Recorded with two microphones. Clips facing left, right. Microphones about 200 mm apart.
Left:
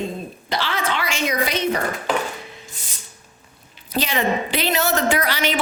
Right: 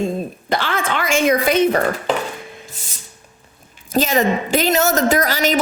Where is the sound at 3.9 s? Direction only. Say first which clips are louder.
Right 5 dB; 45° right (ahead or behind).